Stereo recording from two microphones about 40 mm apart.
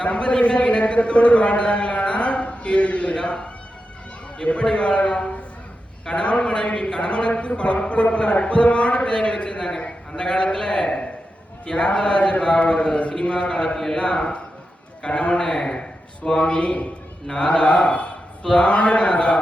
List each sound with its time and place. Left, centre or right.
0.0 s a man's voice: left
13.7 s a man's voice: centre
14.0 s a man's voice: left
16.6 s a man's voice: left